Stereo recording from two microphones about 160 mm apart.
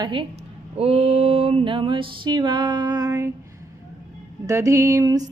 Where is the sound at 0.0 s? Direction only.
30° right (ahead or behind).